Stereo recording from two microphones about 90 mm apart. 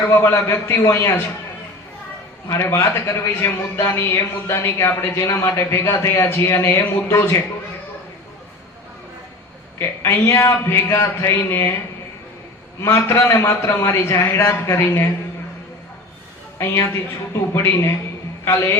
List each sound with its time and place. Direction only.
0.1 s a man's voice: 30° left (ahead or behind)
2.6 s speech: 30° left (ahead or behind)
9.7 s a man's voice: 30° left (ahead or behind)
12.8 s speech: 35° left (ahead or behind)
16.6 s a man's voice: 30° left (ahead or behind)